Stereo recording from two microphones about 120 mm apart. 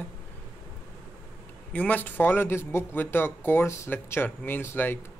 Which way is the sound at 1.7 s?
15° left (ahead or behind).